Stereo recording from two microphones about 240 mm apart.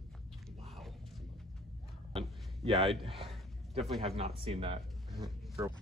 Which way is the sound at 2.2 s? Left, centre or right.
Centre.